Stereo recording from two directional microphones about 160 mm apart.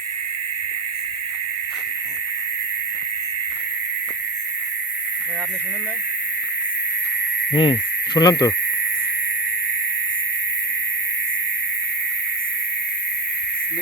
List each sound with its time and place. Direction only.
7.5 s speech: 35° left (ahead or behind)